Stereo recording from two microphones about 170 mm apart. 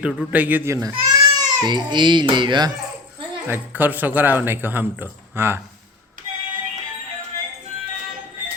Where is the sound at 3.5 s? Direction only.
10° right (ahead or behind).